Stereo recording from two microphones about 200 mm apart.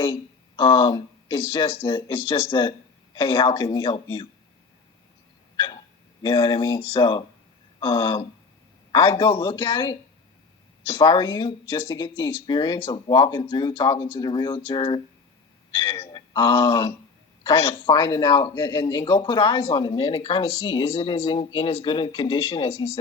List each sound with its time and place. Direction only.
0.0 s a man's voice: 25° left (ahead or behind)
5.5 s hiccup: 25° left (ahead or behind)
6.2 s a man's voice: 25° left (ahead or behind)